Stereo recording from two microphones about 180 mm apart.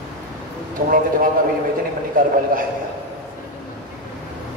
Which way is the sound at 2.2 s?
50° right (ahead or behind).